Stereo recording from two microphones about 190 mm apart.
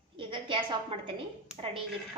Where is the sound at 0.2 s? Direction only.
25° right (ahead or behind).